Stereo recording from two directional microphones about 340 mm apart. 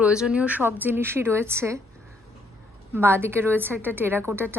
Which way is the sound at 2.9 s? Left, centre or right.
Centre.